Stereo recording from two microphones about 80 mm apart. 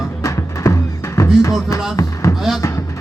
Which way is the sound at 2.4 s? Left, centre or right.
Centre.